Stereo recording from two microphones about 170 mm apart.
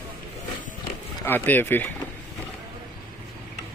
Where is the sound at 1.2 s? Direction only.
10° left (ahead or behind).